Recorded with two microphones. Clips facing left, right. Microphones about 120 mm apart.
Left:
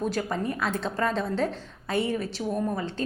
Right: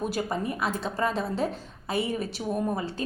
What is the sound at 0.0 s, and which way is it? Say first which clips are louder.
A woman's voice: left 1 dB; 10° right (ahead or behind).